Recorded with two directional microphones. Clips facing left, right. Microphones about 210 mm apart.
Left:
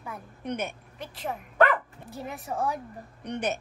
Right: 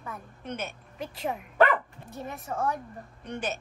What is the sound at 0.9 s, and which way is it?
Speech, centre (ahead or behind).